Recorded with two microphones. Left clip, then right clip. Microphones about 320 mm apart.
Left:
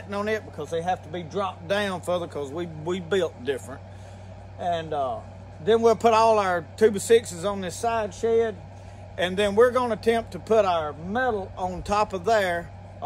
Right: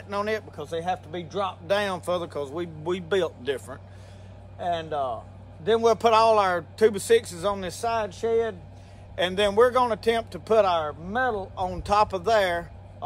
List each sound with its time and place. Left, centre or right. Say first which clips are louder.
0.1 s speech: even; centre